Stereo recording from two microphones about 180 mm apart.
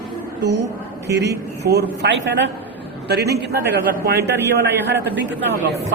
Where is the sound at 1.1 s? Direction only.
65° right (ahead or behind).